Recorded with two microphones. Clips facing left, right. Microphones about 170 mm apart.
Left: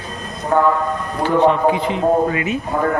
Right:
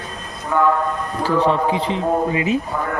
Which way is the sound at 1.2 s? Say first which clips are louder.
Left 4 dB; 35° right (ahead or behind).